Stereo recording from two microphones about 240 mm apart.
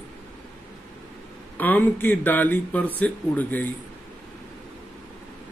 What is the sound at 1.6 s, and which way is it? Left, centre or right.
Speech, centre.